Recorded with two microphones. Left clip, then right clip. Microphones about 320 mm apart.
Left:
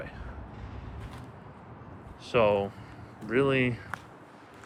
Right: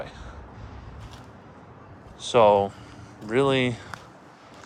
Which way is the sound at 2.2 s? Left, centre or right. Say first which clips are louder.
Right 7 dB; centre.